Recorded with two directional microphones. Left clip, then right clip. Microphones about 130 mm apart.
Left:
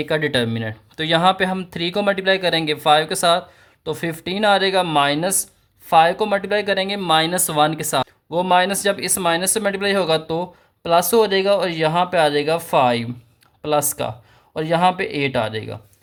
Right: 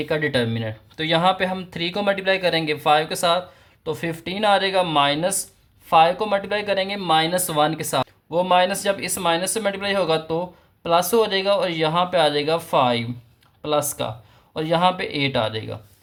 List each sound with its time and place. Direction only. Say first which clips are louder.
0.0 s speech: left 2 dB; 40° left (ahead or behind)